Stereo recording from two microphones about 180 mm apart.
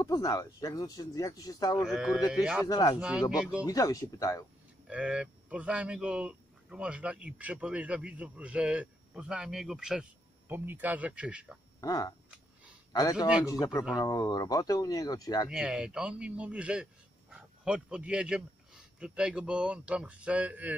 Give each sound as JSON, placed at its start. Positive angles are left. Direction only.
{"t": 0.0, "sound": "speech", "side_deg": 20}
{"t": 1.8, "sound": "speech", "side_deg": -5}
{"t": 2.7, "sound": "speech", "side_deg": 20}
{"t": 3.0, "sound": "speech", "side_deg": -5}
{"t": 3.6, "sound": "speech", "side_deg": 20}
{"t": 4.8, "sound": "speech", "side_deg": -5}
{"t": 11.8, "sound": "speech", "side_deg": 20}
{"t": 15.5, "sound": "speech", "side_deg": -5}